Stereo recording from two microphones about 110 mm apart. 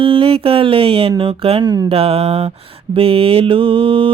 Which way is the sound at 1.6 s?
40° right (ahead or behind).